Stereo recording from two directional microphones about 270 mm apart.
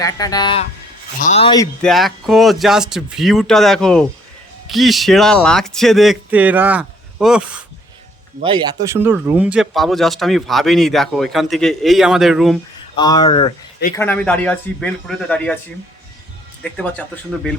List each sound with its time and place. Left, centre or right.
0.0 s speech: centre
1.8 s speech: centre
8.4 s speech: centre
13.0 s speech: centre
13.9 s speech: centre